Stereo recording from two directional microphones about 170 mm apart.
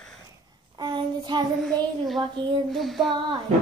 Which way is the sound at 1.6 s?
Centre (ahead or behind).